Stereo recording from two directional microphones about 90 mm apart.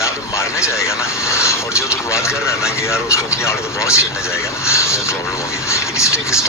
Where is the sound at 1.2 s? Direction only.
35° left (ahead or behind).